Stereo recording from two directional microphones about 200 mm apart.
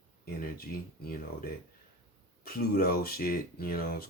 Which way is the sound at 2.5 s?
50° left (ahead or behind).